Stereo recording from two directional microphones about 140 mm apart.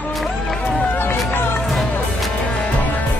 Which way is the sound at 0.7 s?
10° left (ahead or behind).